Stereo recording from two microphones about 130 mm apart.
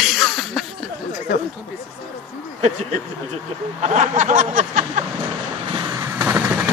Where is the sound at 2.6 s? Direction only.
65° right (ahead or behind).